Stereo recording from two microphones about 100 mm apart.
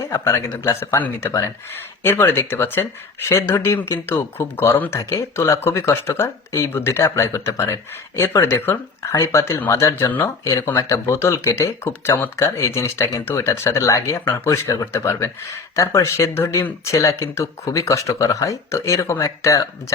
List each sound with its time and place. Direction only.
0.1 s speech: 25° left (ahead or behind)
10.4 s speech: 30° left (ahead or behind)